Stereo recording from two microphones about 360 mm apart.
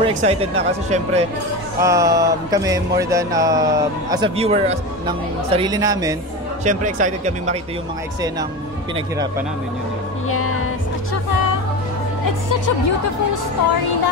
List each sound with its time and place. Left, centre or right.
0.0 s speech: centre
6.6 s speech: right
10.3 s music: left
12.3 s a woman's voice: left